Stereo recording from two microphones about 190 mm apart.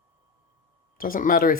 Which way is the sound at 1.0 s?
45° left (ahead or behind).